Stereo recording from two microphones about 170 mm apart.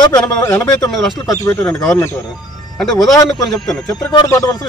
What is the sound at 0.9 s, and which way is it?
Speech, centre (ahead or behind).